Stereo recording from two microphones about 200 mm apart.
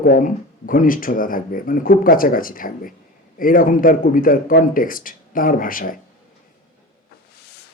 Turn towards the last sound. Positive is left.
turn(degrees=45)  # may be behind; listen again after turning